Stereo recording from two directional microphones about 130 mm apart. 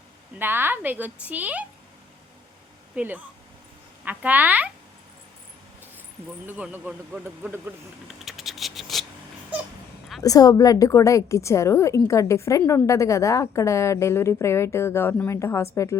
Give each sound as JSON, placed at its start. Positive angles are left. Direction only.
{"t": 0.3, "sound": "a man's voice", "side_deg": -15}
{"t": 2.9, "sound": "a man's voice", "side_deg": -10}
{"t": 6.4, "sound": "a man's voice", "side_deg": -15}
{"t": 8.0, "sound": "a sound", "side_deg": 0}
{"t": 10.2, "sound": "a woman's voice", "side_deg": 25}